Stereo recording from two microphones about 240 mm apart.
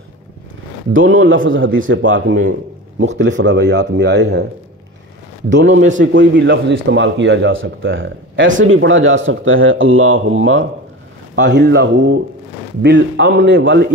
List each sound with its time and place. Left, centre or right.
0.9 s a man's voice: right
5.5 s a man's voice: right
11.4 s a man's voice: right